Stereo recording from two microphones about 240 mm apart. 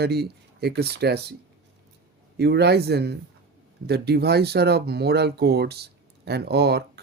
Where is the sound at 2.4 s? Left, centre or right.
Right.